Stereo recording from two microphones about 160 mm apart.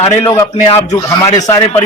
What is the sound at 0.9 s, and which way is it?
Speech, 25° left (ahead or behind).